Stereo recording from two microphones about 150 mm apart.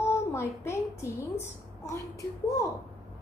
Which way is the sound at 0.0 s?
15° left (ahead or behind).